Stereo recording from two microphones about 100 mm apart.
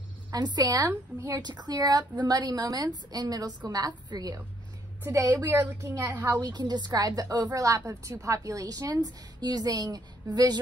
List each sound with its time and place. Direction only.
0.3 s a woman's voice: 40° right (ahead or behind)
5.0 s a woman's voice: 20° right (ahead or behind)
6.4 s a woman's voice: 45° right (ahead or behind)